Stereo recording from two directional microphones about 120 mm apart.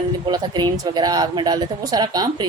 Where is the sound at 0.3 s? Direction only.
35° right (ahead or behind).